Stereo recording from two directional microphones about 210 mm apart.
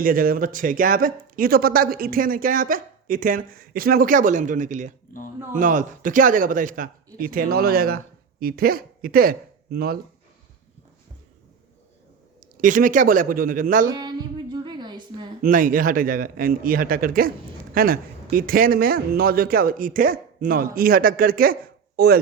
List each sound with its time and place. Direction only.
0.0 s speech: 45° right (ahead or behind)
12.4 s speech: 40° right (ahead or behind)
13.9 s a sound: 20° right (ahead or behind)
15.4 s a man's voice: 40° right (ahead or behind)